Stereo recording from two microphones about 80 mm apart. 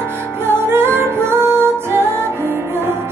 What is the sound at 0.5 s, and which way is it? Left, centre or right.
Music, right.